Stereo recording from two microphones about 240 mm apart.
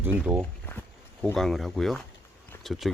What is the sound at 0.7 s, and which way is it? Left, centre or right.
Speech, centre.